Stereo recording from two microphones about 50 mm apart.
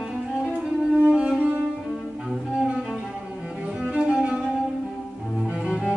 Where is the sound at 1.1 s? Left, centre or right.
Centre.